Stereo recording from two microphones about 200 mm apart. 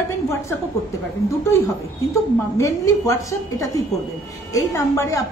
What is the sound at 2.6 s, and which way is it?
A woman's voice, 15° left (ahead or behind).